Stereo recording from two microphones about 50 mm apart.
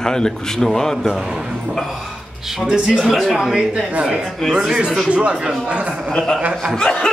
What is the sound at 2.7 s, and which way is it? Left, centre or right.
Speech, centre.